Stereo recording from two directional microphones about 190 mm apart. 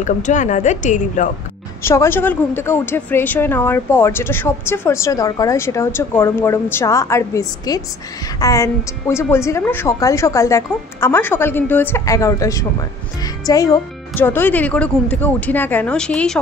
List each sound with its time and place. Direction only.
0.0 s a woman's voice: 40° left (ahead or behind)
1.8 s a woman's voice: 15° left (ahead or behind)